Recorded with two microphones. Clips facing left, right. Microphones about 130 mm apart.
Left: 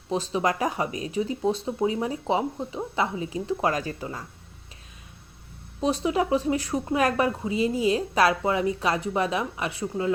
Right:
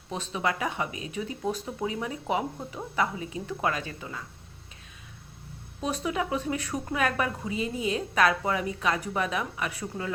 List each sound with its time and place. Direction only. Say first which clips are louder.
0.1 s speech: left 5 dB; 30° left (ahead or behind)
5.8 s speech: left 6 dB; 30° left (ahead or behind)
9.8 s speech: left 6 dB; 20° left (ahead or behind)